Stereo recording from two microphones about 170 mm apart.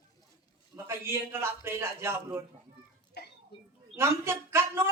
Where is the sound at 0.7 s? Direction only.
15° right (ahead or behind).